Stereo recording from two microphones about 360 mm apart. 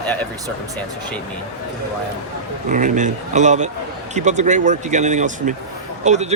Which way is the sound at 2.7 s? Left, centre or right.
Right.